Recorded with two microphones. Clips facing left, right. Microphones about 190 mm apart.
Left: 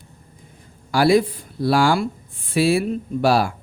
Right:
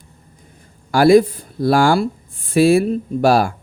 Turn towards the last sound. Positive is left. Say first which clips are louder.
# right 3 dB
turn(degrees=-45)  # may be behind; listen again after turning